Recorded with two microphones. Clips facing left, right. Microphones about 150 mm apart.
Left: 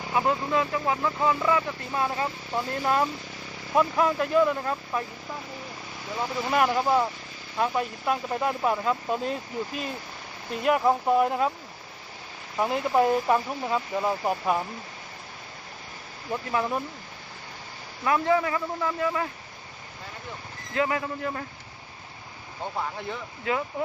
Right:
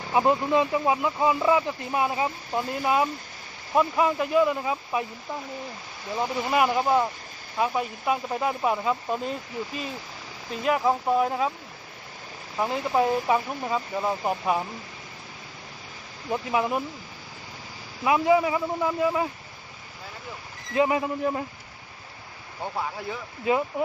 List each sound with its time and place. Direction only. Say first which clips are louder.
0.1 s speech: right 4 dB; 20° right (ahead or behind)
6.5 s speech: even; 5° right (ahead or behind)
12.5 s speech: left 1 dB; centre (ahead or behind)
16.3 s speech: right 2 dB; 15° right (ahead or behind)
18.0 s speech: right 3 dB; 15° right (ahead or behind)
20.7 s speech: right 4 dB; 20° right (ahead or behind)
22.8 s speech: even; 5° right (ahead or behind)
23.5 s speech: right 4 dB; 20° right (ahead or behind)